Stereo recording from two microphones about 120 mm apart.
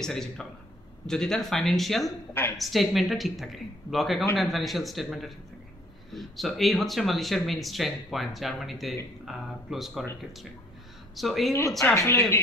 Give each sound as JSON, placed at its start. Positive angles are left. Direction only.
{"t": 0.0, "sound": "speech", "side_deg": 5}
{"t": 11.1, "sound": "speech", "side_deg": 0}
{"t": 11.9, "sound": "speech", "side_deg": 20}